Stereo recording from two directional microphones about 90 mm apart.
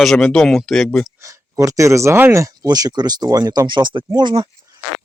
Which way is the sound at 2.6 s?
45° right (ahead or behind).